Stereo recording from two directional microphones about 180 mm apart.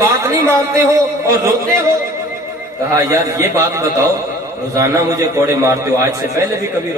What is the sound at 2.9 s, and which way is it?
Speech, 20° right (ahead or behind).